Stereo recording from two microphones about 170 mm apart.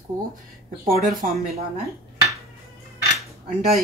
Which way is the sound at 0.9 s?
55° right (ahead or behind).